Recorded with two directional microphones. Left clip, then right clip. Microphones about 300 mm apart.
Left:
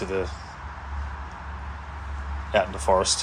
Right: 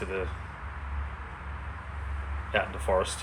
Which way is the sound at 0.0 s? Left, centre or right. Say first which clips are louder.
Left 5 dB; centre.